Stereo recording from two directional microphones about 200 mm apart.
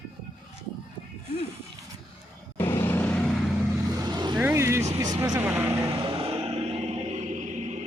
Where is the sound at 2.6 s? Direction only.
10° left (ahead or behind).